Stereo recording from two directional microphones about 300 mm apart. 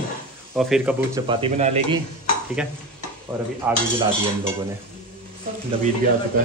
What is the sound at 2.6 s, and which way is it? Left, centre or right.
Speech, centre.